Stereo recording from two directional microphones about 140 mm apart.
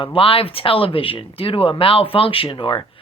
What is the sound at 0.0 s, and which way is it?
Speech, 40° left (ahead or behind).